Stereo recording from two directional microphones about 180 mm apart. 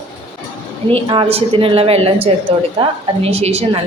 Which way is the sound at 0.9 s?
30° right (ahead or behind).